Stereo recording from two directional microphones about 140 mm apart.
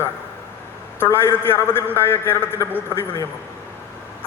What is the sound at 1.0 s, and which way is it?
A man's voice, 15° left (ahead or behind).